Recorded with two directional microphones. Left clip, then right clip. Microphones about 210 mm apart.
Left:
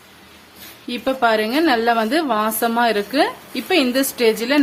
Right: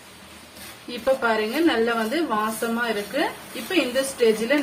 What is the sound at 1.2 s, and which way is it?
A woman's voice, 55° left (ahead or behind).